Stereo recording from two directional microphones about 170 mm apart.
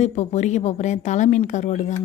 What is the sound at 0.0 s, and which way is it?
Speech, 40° left (ahead or behind).